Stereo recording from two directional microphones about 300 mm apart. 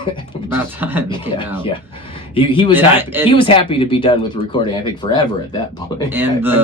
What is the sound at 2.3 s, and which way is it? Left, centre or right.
Speech, centre.